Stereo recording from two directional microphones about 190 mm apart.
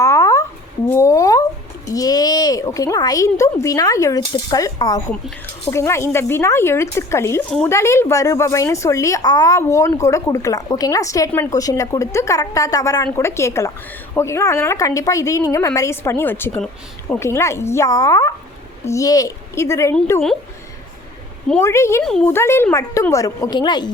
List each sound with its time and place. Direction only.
0.0 s a sound: 15° left (ahead or behind)
1.9 s speech: 20° left (ahead or behind)
21.6 s speech: 15° left (ahead or behind)
22.0 s speech: 5° left (ahead or behind); by 23.9 s 25° left (ahead or behind)